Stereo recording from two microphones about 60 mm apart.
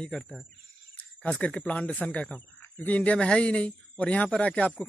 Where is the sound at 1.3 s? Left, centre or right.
Centre.